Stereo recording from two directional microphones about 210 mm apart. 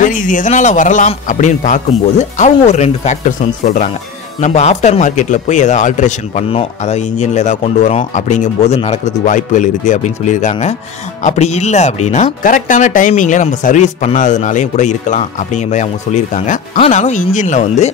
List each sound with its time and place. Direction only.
0.0 s speech: 40° left (ahead or behind)